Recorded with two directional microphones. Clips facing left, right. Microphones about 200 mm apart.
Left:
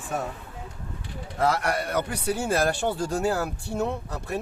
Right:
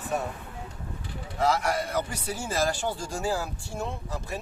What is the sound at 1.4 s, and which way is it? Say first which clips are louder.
A man's voice: left 1 dB; 60° left (ahead or behind).